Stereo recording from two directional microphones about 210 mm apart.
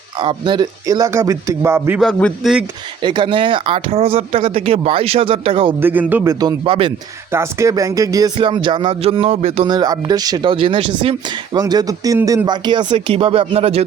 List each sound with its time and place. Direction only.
0.2 s speech: 25° right (ahead or behind)
2.0 s a man's voice: centre (ahead or behind)
3.0 s speech: 25° right (ahead or behind)
5.8 s speech: 10° right (ahead or behind); by 6.9 s 25° right (ahead or behind)
7.3 s speech: 10° right (ahead or behind); by 13.8 s 30° right (ahead or behind)